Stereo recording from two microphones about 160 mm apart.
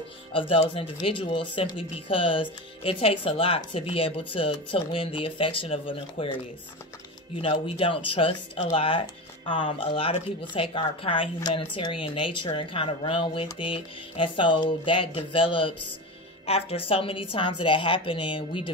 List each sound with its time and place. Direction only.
0.3 s speech: 35° left (ahead or behind)